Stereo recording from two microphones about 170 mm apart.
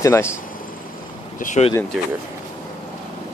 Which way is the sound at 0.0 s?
15° left (ahead or behind).